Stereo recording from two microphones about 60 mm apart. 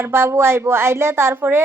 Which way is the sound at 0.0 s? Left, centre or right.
Right.